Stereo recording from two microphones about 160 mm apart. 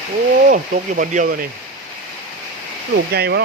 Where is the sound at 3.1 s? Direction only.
85° right.